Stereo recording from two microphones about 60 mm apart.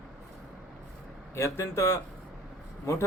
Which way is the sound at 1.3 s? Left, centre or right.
Left.